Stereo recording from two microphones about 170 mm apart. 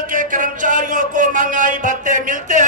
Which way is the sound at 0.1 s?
50° right (ahead or behind).